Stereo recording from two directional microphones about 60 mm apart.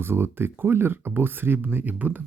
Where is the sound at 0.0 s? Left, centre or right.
Right.